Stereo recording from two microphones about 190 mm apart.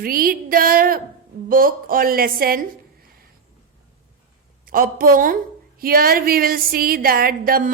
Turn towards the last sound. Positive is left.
turn(degrees=-50)  # may be behind; listen again after turning